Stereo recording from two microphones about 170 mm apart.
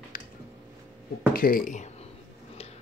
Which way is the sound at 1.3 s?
60° left (ahead or behind).